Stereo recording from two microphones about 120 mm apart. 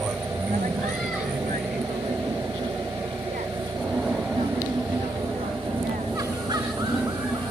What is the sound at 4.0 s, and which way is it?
Vehicle, 5° right (ahead or behind).